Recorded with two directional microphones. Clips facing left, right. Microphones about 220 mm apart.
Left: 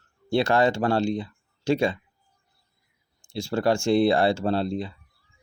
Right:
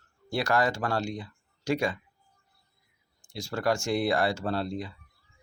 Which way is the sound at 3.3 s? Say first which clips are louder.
Left 5 dB; 25° left (ahead or behind).